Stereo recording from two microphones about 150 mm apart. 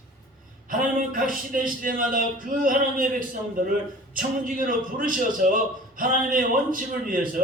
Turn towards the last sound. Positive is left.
turn(degrees=-65)  # may be behind; listen again after turning